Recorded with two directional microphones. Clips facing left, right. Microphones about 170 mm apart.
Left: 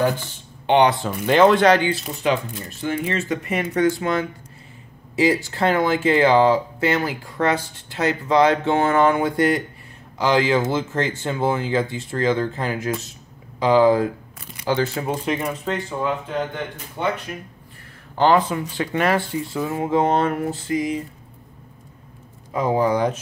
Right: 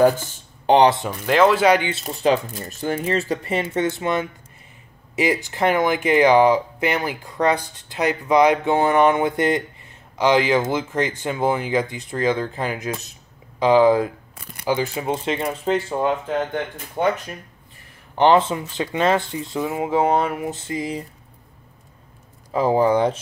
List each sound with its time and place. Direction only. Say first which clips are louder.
0.0 s a sound: right 5 dB; 45° right (ahead or behind)
1.2 s speech: left 1 dB; centre (ahead or behind)
1.8 s speech: left 4 dB; 25° right (ahead or behind)
2.0 s speech: right 3 dB; 35° right (ahead or behind)
17.0 s speech: right 4 dB; 45° right (ahead or behind)
18.1 s speech: right 1 dB; 20° right (ahead or behind)
20.5 s speech: left 4 dB; 25° right (ahead or behind)
22.5 s speech: right 2 dB; 30° right (ahead or behind)